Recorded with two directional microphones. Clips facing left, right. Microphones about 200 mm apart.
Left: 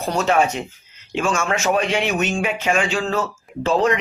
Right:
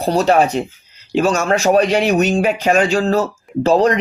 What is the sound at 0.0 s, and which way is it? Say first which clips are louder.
Speech: right 5 dB; 35° right (ahead or behind).